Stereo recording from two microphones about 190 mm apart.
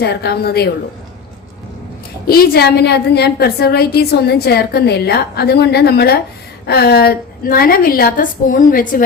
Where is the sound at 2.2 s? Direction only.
50° left (ahead or behind).